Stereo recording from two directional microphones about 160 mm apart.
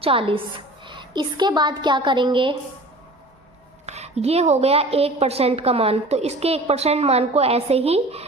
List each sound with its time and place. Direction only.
0.0 s a woman's voice: 35° right (ahead or behind)
3.8 s a woman's voice: 40° right (ahead or behind)